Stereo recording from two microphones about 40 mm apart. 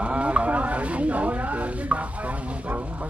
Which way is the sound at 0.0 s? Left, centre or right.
Right.